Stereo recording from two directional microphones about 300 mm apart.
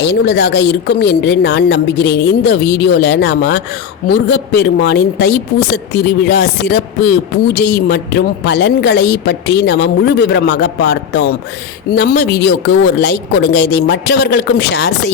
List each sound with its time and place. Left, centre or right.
0.0 s a woman's voice: left